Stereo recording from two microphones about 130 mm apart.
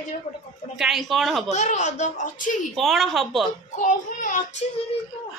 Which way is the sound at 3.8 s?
80° left.